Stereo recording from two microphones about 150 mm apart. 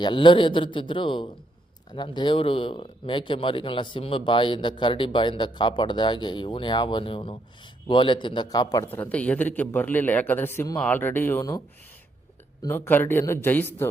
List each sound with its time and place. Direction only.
0.0 s speech: 30° left (ahead or behind)
8.9 s a man's voice: 10° left (ahead or behind)
12.6 s a man's voice: 15° left (ahead or behind)